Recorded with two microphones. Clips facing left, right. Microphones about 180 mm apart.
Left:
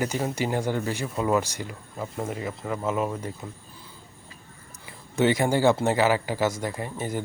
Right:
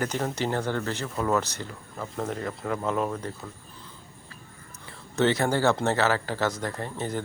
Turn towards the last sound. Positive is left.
turn(degrees=10)  # may be behind; listen again after turning